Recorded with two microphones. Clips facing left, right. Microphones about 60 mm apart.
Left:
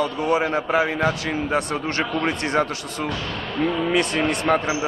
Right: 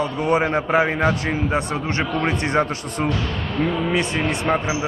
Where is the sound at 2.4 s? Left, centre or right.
Right.